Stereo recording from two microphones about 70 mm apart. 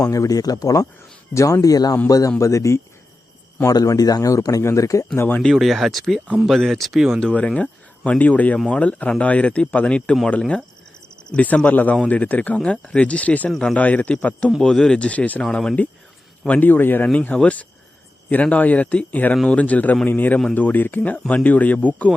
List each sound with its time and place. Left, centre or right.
0.0 s speech: left
1.3 s speech: left
3.7 s speech: left
5.1 s speech: left
5.4 s speech: centre
7.2 s speech: centre
13.5 s speech: centre
13.7 s speech: left
14.6 s speech: centre
15.4 s speech: centre
16.5 s speech: left
17.1 s speech: centre